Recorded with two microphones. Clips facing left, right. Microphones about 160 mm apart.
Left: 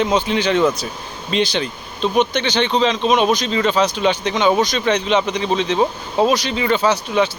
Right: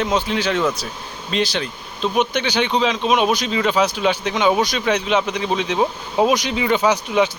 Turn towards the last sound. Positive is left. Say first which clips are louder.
# even
turn(degrees=-15)  # may be behind; listen again after turning